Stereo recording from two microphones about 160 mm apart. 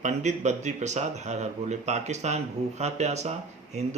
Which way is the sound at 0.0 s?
45° right (ahead or behind).